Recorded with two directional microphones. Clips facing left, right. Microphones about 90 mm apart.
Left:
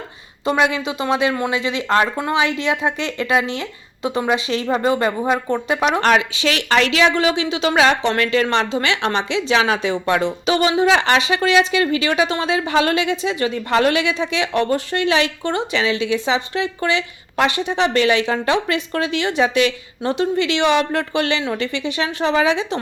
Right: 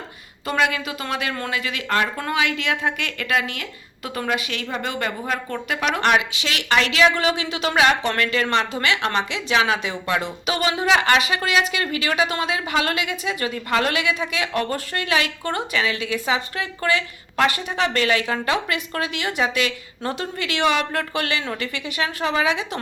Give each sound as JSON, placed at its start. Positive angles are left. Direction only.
{"t": 0.4, "sound": "a woman's voice", "side_deg": 25}